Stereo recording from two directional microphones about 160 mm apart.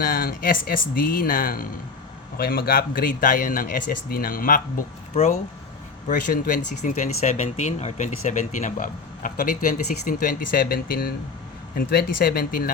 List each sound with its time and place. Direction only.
0.0 s speech: 65° left (ahead or behind)
6.1 s speech: 60° left (ahead or behind)